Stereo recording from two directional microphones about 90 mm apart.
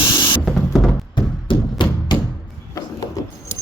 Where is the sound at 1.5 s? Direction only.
65° left (ahead or behind).